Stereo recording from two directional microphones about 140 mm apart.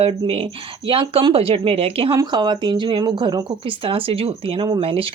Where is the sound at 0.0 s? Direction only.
45° right (ahead or behind).